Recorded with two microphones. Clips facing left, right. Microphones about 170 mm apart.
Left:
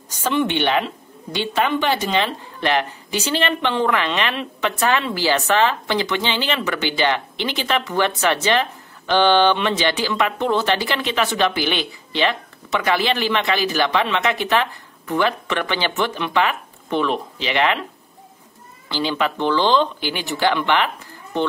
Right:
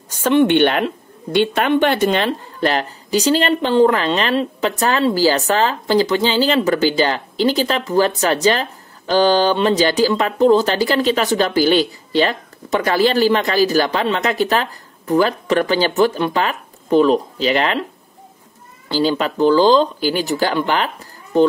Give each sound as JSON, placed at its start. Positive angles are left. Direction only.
{"t": 0.1, "sound": "a woman's voice", "side_deg": -55}
{"t": 18.9, "sound": "a woman's voice", "side_deg": -40}